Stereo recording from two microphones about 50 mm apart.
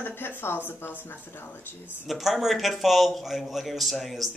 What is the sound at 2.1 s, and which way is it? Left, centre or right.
A man's voice, centre.